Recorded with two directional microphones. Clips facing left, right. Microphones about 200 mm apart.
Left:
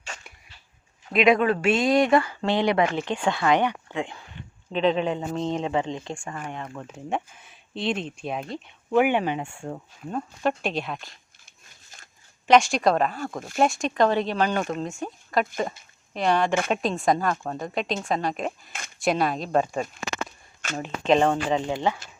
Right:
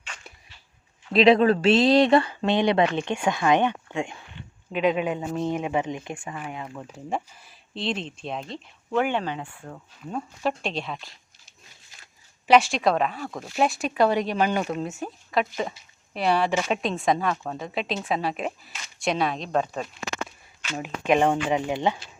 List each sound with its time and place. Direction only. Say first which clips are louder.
1.1 s speech: right 3 dB; 30° right (ahead or behind)
6.5 s speech: even; 5° right (ahead or behind); by 9.8 s 25° left (ahead or behind)
10.1 s speech: left 2 dB; centre (ahead or behind)
12.5 s speech: left 1 dB; centre (ahead or behind)
20.7 s speech: left 1 dB; 10° right (ahead or behind)